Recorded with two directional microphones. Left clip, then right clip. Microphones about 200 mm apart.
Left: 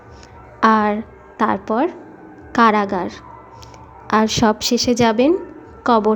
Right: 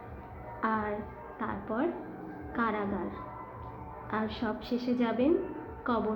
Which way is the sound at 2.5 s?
90° left.